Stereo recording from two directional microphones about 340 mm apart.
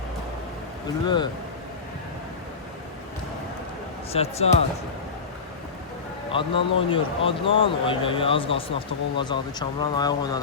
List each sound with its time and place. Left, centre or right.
1.0 s speech: centre
4.1 s speech: centre
6.3 s speech: centre